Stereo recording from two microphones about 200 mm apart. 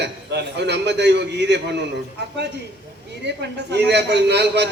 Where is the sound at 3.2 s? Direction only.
55° right (ahead or behind).